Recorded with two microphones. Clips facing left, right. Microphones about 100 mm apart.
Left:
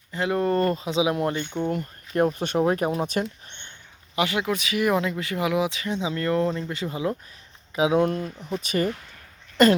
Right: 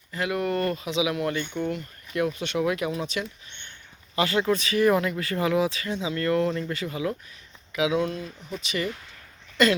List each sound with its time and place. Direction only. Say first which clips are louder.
0.1 s speech: left 3 dB; 30° left (ahead or behind)
1.7 s speech: left 4 dB; 45° left (ahead or behind)
4.1 s speech: right 1 dB; 15° left (ahead or behind); by 7.9 s 35° left (ahead or behind)
7.9 s speech: left 5 dB; 50° left (ahead or behind)